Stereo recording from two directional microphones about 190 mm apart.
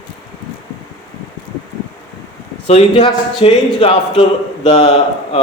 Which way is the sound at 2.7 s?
35° left (ahead or behind).